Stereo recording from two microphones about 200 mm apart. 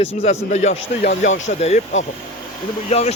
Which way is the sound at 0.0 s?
35° left (ahead or behind).